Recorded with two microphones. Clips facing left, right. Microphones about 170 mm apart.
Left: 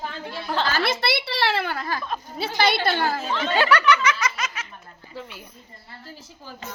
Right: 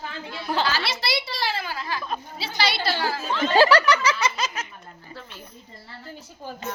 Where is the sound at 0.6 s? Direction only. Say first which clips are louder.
Left 3 dB; 50° left (ahead or behind).